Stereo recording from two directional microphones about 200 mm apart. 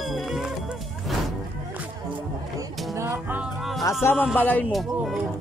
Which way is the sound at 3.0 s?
10° right (ahead or behind).